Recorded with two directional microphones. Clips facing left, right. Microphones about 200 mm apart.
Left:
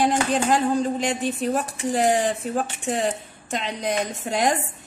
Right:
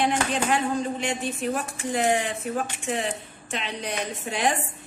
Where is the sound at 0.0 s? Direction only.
35° left (ahead or behind).